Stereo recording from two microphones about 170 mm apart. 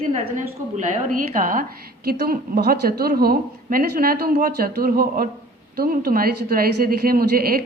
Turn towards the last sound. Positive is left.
turn(degrees=-60)  # may be behind; listen again after turning